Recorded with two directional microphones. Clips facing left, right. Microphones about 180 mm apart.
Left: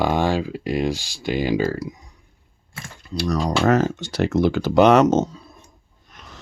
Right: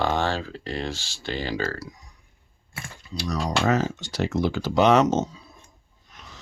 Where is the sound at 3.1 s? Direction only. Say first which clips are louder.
Left 5 dB; 55° left (ahead or behind).